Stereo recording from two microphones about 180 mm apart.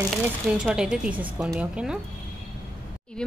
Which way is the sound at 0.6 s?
5° right (ahead or behind).